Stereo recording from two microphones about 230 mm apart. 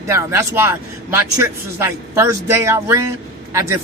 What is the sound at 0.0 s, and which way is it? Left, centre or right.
Speech, centre.